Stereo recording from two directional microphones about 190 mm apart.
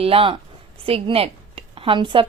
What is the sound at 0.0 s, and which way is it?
A woman's voice, 30° right (ahead or behind).